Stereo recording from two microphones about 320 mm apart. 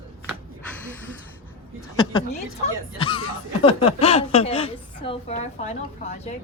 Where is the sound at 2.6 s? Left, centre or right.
Centre.